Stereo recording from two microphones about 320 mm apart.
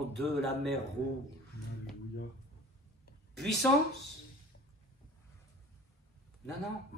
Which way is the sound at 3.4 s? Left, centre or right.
Centre.